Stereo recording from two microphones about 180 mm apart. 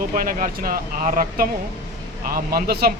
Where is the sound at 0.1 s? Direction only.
50° right (ahead or behind).